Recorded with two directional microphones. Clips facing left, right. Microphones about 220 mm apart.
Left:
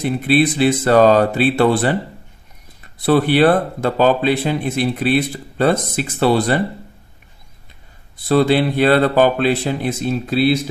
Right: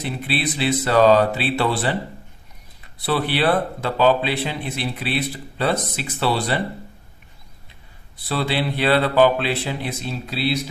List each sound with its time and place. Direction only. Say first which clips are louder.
0.0 s speech: left 9 dB; 45° left (ahead or behind)
3.1 s speech: left 7 dB; 45° left (ahead or behind)
8.3 s speech: left 9 dB; 45° left (ahead or behind)